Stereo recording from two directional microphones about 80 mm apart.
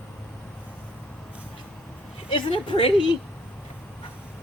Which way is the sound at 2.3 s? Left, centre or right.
Left.